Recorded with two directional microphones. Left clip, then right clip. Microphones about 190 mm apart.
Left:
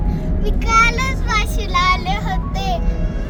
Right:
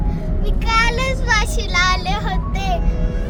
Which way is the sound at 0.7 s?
65° right (ahead or behind).